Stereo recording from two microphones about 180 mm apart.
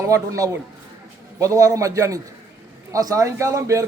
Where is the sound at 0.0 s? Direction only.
20° right (ahead or behind).